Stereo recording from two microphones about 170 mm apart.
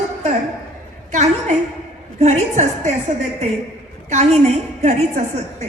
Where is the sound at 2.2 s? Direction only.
40° right (ahead or behind).